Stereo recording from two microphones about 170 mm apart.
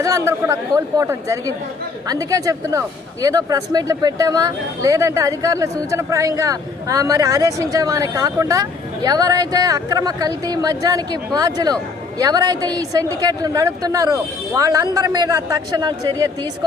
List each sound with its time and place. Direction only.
0.0 s speech: 20° right (ahead or behind)